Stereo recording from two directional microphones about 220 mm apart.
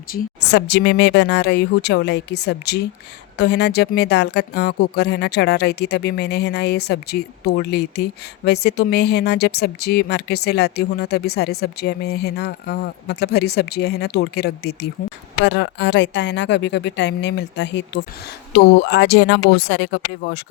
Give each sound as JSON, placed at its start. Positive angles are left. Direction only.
{"t": 0.1, "sound": "a woman's voice", "side_deg": 50}